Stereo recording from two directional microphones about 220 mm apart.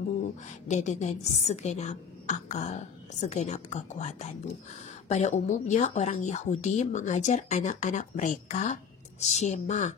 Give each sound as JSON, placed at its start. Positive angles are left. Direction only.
{"t": 0.7, "sound": "a woman's voice", "side_deg": 35}